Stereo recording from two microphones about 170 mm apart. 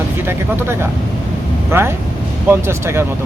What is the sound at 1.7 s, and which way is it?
Speech, 15° right (ahead or behind).